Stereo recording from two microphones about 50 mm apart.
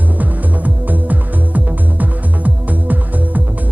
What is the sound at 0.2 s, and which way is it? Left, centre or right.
Music, right.